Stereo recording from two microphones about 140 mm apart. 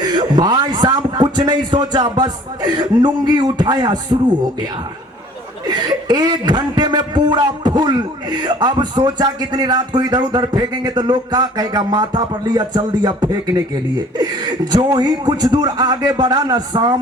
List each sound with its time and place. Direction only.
0.0 s a man's voice: 30° right (ahead or behind)
5.6 s speech: 30° right (ahead or behind)